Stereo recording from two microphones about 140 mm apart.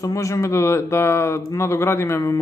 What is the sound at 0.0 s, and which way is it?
Speech, 25° left (ahead or behind).